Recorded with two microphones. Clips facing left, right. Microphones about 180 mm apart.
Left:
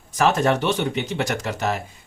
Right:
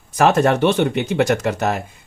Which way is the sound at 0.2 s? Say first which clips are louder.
Right 5 dB; 55° right (ahead or behind).